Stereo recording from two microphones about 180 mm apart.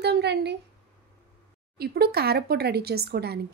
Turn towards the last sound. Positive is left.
turn(degrees=-60)  # may be behind; listen again after turning